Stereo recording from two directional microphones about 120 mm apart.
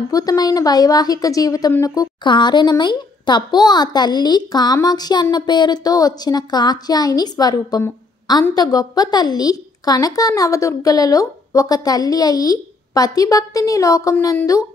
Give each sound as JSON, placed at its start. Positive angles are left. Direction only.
{"t": 0.1, "sound": "a woman's voice", "side_deg": 30}
{"t": 2.2, "sound": "a woman's voice", "side_deg": 40}